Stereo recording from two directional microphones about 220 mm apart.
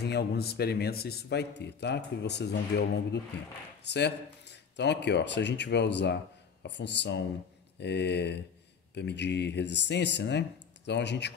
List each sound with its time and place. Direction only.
0.0 s a man's voice: 50° left (ahead or behind)